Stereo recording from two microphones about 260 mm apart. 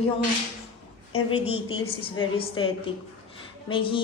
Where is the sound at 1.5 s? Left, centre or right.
Left.